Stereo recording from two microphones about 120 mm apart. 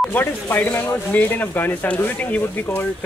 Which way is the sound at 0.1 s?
15° left (ahead or behind).